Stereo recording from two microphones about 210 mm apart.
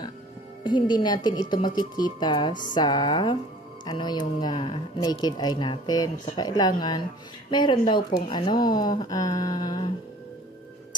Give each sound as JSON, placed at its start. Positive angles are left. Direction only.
{"t": 0.7, "sound": "speech", "side_deg": 20}